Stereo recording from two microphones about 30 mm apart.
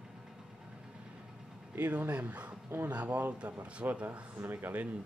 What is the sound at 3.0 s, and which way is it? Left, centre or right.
Speech, right.